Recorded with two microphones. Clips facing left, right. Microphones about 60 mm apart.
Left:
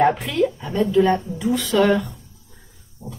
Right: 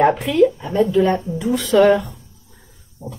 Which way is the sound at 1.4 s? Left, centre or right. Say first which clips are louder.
Right 3 dB; centre.